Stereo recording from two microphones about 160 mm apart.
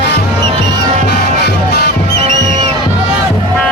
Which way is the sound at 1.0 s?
80° left.